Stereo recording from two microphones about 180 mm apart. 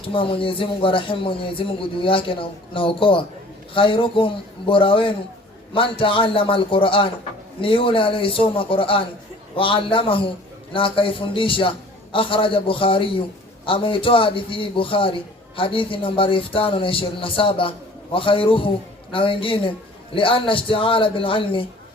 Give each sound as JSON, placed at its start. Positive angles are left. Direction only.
{"t": 0.0, "sound": "a man's voice", "side_deg": 30}